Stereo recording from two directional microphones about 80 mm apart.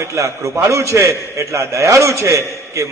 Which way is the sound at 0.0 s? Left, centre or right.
Right.